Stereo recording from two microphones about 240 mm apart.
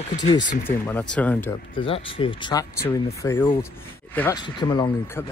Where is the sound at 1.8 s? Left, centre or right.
Left; by 4.4 s centre.